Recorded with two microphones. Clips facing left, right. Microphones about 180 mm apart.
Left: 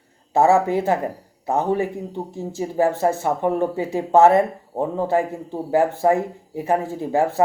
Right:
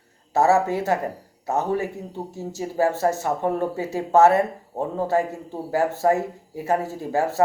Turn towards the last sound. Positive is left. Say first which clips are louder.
# left 3 dB
turn(degrees=15)  # may be behind; listen again after turning